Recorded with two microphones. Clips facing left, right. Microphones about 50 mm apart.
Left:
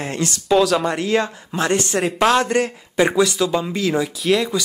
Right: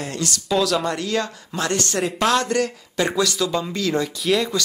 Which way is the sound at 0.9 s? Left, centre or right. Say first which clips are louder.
Left 4 dB; left.